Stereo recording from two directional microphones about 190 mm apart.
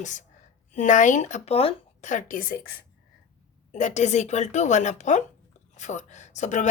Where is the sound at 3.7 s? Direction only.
40° left (ahead or behind).